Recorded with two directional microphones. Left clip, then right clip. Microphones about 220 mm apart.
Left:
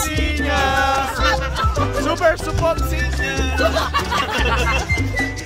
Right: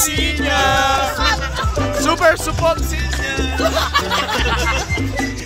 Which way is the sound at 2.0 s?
45° right (ahead or behind).